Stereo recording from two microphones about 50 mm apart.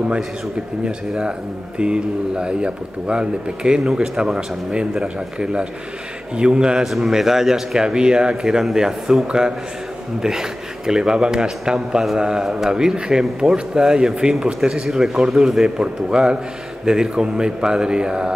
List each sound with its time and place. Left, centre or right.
0.8 s a man's voice: centre
6.8 s a man's voice: centre